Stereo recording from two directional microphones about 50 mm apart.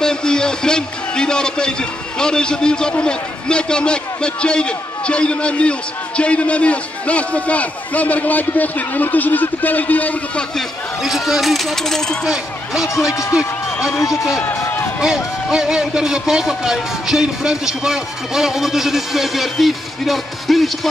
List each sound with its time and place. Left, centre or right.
0.0 s a man's voice: centre; by 10.4 s left
11.0 s speech: centre
12.3 s a man's voice: centre
13.9 s a man's voice: left
15.0 s a man's voice: centre